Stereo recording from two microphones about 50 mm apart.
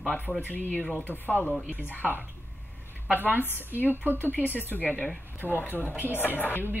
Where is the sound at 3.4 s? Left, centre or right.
Left.